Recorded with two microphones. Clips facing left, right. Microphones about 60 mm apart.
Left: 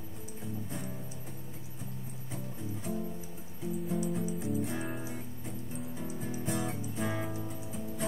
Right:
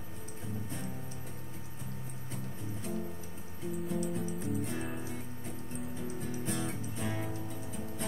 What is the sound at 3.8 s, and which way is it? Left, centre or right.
Music, centre.